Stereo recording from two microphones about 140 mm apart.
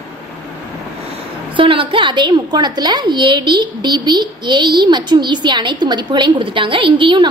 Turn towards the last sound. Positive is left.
turn(degrees=-35)  # may be behind; listen again after turning